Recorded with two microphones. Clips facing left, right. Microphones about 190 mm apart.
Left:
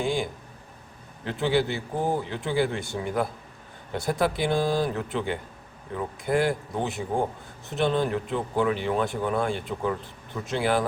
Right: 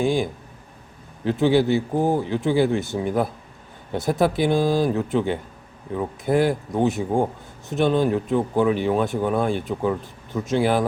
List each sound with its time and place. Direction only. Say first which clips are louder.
0.0 s speech: right 5 dB; 20° right (ahead or behind)